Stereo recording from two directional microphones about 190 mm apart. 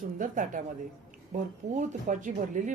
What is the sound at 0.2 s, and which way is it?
Speech, 45° right (ahead or behind).